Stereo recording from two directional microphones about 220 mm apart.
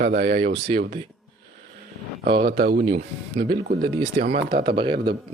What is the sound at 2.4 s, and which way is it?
Speech, 45° right (ahead or behind).